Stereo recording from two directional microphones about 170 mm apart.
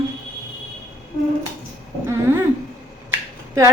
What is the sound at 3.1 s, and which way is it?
Finger snapping, 20° right (ahead or behind).